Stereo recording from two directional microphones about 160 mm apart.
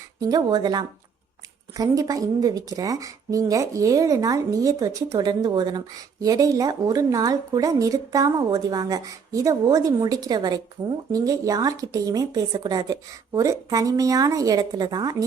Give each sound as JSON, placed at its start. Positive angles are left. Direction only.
{"t": 0.2, "sound": "a woman's voice", "side_deg": -25}